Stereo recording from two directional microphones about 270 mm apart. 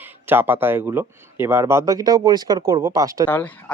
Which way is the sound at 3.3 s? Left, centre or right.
Centre.